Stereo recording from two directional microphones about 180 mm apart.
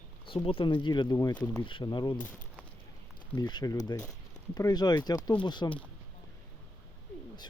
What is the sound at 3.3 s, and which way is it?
Speech, 20° left (ahead or behind).